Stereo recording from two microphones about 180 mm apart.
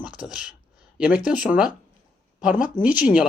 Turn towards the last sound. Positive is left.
turn(degrees=-5)  # may be behind; listen again after turning